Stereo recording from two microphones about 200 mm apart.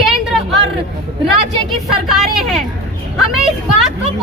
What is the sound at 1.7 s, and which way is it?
Speech, centre (ahead or behind).